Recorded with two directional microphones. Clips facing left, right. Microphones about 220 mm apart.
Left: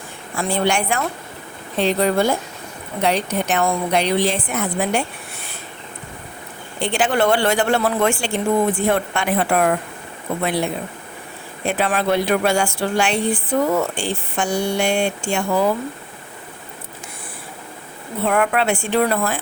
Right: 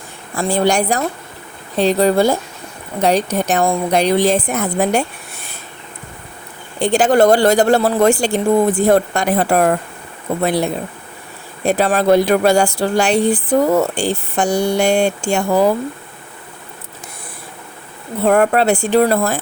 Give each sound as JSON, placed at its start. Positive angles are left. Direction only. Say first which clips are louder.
{"t": 0.3, "sound": "speech", "louder": "right 4 dB", "side_deg": -40}
{"t": 6.7, "sound": "speech", "louder": "right 7 dB", "side_deg": -40}
{"t": 18.3, "sound": "speech", "louder": "right 6 dB", "side_deg": -40}